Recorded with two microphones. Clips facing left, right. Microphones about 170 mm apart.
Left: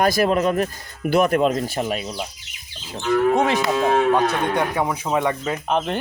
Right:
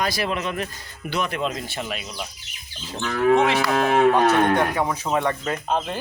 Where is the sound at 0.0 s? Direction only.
45° left (ahead or behind).